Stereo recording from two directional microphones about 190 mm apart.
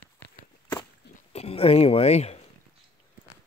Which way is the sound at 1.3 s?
30° left (ahead or behind).